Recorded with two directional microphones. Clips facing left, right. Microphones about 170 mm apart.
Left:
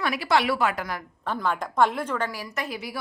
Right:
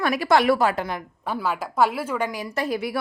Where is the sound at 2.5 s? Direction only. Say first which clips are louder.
Right 6 dB; 35° right (ahead or behind).